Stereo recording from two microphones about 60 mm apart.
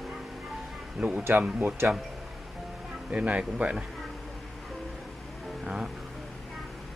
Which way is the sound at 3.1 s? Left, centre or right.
Centre.